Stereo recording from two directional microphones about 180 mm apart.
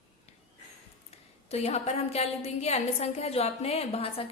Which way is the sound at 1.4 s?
35° left (ahead or behind).